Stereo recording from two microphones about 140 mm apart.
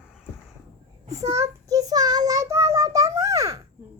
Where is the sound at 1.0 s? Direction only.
25° right (ahead or behind).